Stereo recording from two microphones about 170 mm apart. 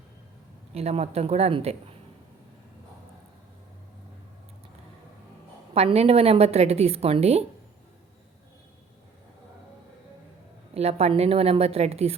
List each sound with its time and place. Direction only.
0.7 s a woman's voice: 35° right (ahead or behind)
5.7 s a woman's voice: 40° right (ahead or behind)
10.8 s a woman's voice: 40° right (ahead or behind)